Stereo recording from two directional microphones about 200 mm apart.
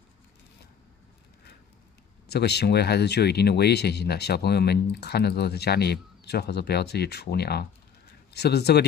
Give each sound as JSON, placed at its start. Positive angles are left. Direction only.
{"t": 2.2, "sound": "speech", "side_deg": 55}